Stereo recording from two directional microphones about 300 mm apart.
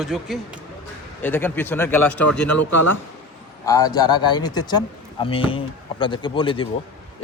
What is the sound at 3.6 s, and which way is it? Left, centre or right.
A man's voice, centre.